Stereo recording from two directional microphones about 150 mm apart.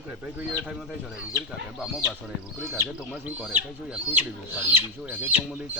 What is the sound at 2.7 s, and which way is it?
Speech, 15° right (ahead or behind).